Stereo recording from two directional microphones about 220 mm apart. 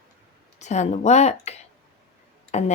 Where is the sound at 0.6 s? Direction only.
30° left (ahead or behind).